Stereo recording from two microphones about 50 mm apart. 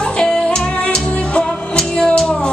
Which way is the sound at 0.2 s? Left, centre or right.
Centre.